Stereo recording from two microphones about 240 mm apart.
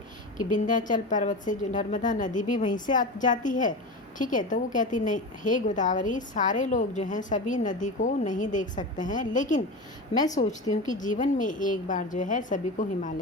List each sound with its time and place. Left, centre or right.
0.3 s a woman's voice: left